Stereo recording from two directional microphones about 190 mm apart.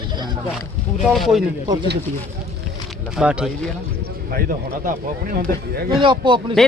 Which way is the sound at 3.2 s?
5° right (ahead or behind).